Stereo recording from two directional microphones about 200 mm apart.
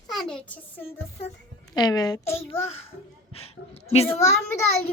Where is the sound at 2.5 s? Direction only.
30° left (ahead or behind).